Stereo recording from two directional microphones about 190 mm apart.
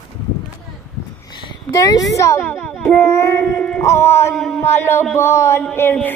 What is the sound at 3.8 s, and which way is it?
Speech, 15° left (ahead or behind).